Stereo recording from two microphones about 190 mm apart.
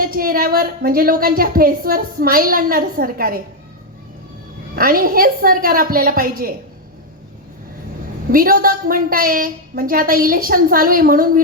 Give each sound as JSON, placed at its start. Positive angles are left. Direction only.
{"t": 0.0, "sound": "a woman's voice", "side_deg": -50}
{"t": 4.7, "sound": "a woman's voice", "side_deg": -50}
{"t": 8.3, "sound": "a woman's voice", "side_deg": -50}